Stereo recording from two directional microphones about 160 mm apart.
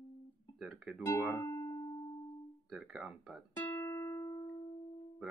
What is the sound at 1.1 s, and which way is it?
Speech, 20° left (ahead or behind).